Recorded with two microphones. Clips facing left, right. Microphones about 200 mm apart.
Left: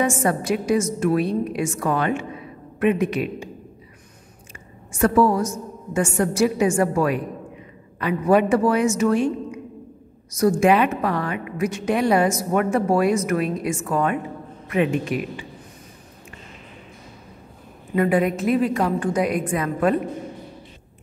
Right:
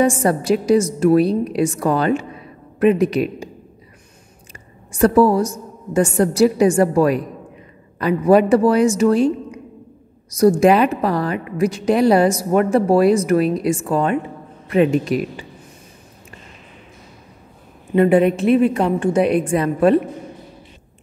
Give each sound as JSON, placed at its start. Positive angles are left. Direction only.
{"t": 0.0, "sound": "a woman's voice", "side_deg": -35}
{"t": 4.9, "sound": "a woman's voice", "side_deg": -35}
{"t": 10.6, "sound": "a woman's voice", "side_deg": -35}
{"t": 17.9, "sound": "a woman's voice", "side_deg": -30}